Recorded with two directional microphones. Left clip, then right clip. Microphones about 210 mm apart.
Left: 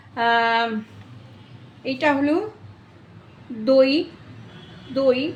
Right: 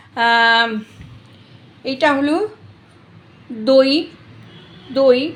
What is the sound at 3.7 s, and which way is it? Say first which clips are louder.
A woman's voice: right 4 dB; 15° right (ahead or behind).